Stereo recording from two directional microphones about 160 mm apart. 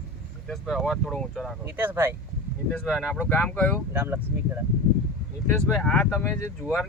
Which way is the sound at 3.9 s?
10° right (ahead or behind).